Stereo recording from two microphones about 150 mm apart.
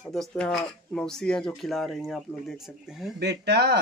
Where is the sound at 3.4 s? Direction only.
90° right.